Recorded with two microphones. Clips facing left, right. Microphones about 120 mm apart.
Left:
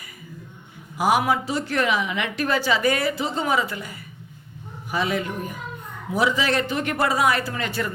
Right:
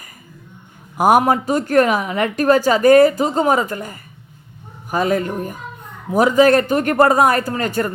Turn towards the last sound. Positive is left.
turn(degrees=-45)  # may be behind; listen again after turning